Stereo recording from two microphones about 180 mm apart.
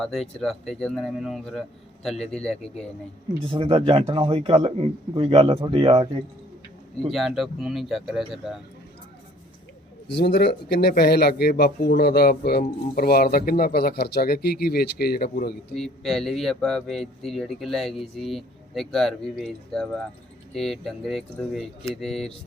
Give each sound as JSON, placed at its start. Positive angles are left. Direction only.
{"t": 0.0, "sound": "speech", "side_deg": 5}
{"t": 3.4, "sound": "a man's voice", "side_deg": -30}
{"t": 7.1, "sound": "speech", "side_deg": 0}
{"t": 10.2, "sound": "speech", "side_deg": 65}
{"t": 15.7, "sound": "speech", "side_deg": 0}